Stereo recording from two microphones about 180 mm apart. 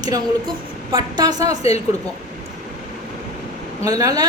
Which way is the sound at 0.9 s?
20° right (ahead or behind).